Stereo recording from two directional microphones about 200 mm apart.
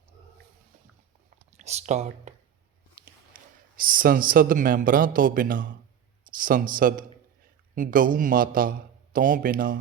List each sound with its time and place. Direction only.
1.6 s speech: 35° right (ahead or behind)
3.3 s a man's voice: 45° right (ahead or behind)